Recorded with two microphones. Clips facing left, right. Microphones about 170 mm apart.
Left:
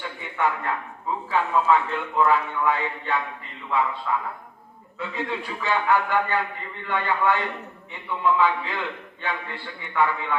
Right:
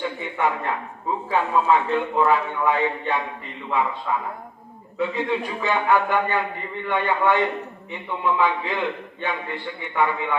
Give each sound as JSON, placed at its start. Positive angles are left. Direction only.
{"t": 0.2, "sound": "a man's voice", "side_deg": -20}